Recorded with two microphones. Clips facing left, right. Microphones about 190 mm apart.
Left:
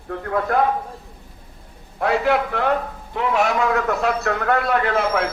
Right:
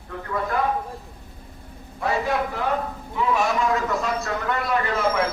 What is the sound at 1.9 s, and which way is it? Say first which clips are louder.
A man's voice: left 5 dB; 70° left (ahead or behind).